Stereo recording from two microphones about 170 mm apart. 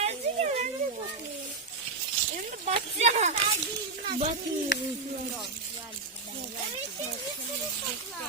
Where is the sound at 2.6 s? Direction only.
40° right (ahead or behind).